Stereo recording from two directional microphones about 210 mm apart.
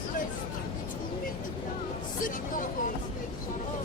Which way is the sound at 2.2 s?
40° left (ahead or behind).